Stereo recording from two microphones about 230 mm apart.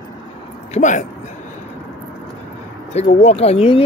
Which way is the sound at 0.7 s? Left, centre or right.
Left.